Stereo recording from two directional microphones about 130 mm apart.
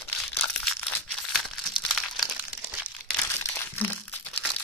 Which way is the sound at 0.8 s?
15° left (ahead or behind).